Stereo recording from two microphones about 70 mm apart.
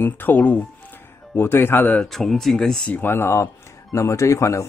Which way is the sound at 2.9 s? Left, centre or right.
Left.